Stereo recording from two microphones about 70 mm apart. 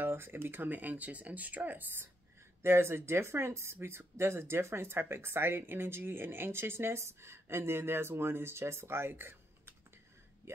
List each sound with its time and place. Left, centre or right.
0.0 s speech: right